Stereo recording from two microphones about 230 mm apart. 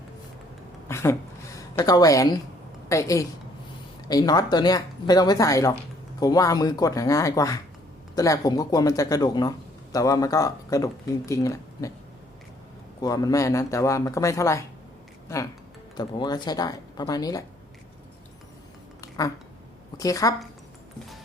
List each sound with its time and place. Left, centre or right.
0.9 s a sound: centre
1.5 s a woman's voice: centre
13.0 s speech: centre
20.0 s speech: centre